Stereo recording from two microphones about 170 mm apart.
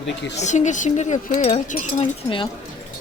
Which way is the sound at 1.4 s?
40° left (ahead or behind).